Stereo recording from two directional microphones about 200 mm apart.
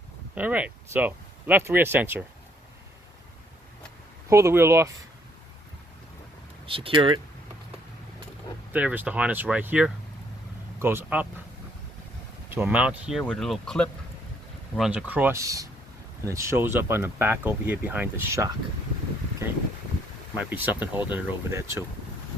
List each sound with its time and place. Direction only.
0.3 s speech: 5° right (ahead or behind)
4.3 s speech: 15° right (ahead or behind)
6.7 s speech: 25° right (ahead or behind)
8.7 s speech: 5° right (ahead or behind)
12.5 s speech: 5° right (ahead or behind)
20.4 s speech: 10° right (ahead or behind)